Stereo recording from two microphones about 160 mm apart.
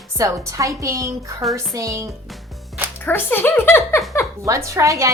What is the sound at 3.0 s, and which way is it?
Speech, 15° left (ahead or behind).